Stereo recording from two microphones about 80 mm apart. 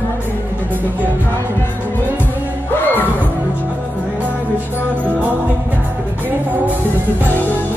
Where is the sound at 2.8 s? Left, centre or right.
Left.